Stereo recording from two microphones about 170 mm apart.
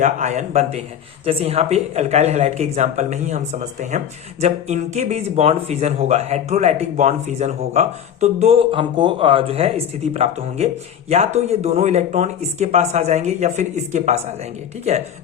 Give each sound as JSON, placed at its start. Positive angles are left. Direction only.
{"t": 0.0, "sound": "a man's voice", "side_deg": -45}